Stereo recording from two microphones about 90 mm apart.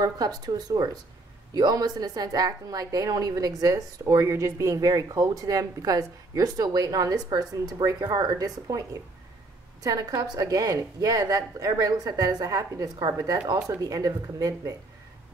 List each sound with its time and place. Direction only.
0.0 s a woman's voice: 45° right (ahead or behind)
9.8 s a woman's voice: 45° right (ahead or behind)